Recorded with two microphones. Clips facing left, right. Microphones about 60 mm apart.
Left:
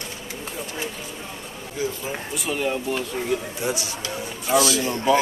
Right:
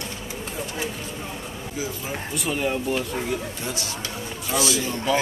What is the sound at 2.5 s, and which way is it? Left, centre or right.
Speech, centre.